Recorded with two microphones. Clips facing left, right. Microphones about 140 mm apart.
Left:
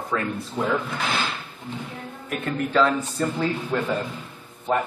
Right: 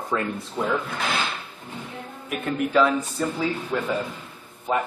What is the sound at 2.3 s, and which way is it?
Speech, 5° right (ahead or behind).